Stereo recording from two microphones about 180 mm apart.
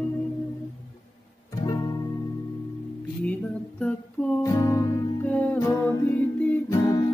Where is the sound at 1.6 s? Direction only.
25° left (ahead or behind).